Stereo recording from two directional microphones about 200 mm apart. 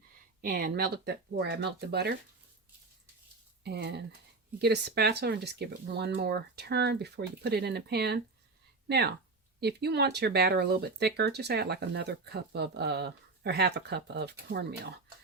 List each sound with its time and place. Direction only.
0.4 s speech: 45° right (ahead or behind)
3.6 s speech: 55° right (ahead or behind)